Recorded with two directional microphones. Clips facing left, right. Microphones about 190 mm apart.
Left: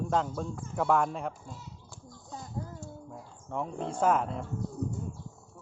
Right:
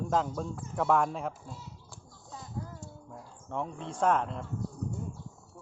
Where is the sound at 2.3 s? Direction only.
Centre (ahead or behind).